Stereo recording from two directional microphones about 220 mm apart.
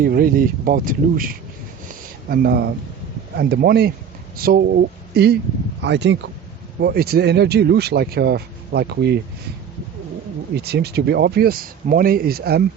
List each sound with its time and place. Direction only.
0.0 s speech: 40° right (ahead or behind)
1.9 s a sound: 40° right (ahead or behind)
3.3 s speech: 45° right (ahead or behind)
10.6 s speech: 45° right (ahead or behind)